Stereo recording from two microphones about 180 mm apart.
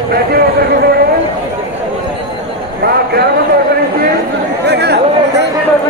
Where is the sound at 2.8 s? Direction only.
65° right (ahead or behind).